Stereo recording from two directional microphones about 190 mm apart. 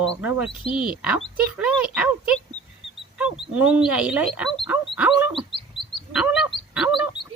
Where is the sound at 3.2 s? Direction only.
5° right (ahead or behind).